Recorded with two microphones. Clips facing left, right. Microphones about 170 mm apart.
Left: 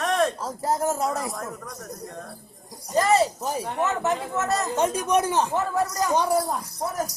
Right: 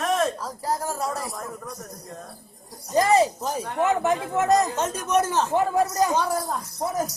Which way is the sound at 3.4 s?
10° left (ahead or behind).